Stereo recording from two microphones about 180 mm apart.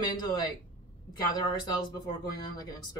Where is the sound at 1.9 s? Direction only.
25° left (ahead or behind).